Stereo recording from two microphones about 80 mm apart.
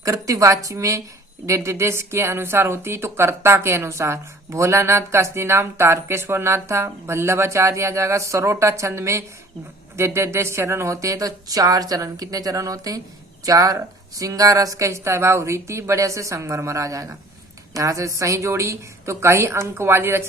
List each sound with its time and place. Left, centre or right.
0.0 s speech: right